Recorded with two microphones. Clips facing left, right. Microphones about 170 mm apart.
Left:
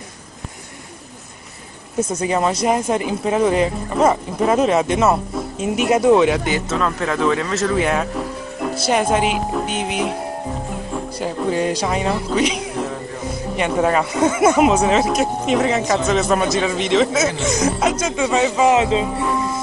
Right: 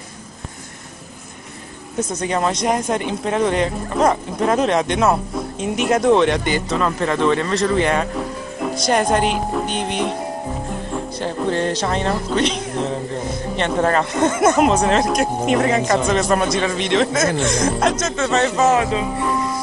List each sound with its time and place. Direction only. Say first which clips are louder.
2.0 s speech: left 2 dB; 10° left (ahead or behind)
18.8 s speech: left 2 dB; 20° left (ahead or behind)